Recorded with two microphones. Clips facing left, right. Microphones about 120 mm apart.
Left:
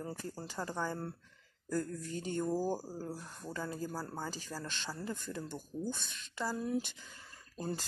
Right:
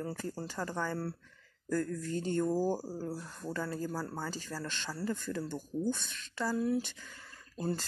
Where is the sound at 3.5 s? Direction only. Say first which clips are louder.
Right 3 dB; 15° left (ahead or behind).